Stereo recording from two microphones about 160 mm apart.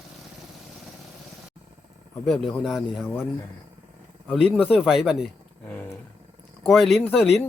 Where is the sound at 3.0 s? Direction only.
10° left (ahead or behind).